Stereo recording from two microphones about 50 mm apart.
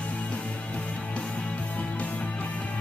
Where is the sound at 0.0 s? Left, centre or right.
Left.